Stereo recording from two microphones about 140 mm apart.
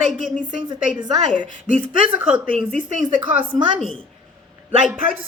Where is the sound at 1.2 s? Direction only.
60° right (ahead or behind).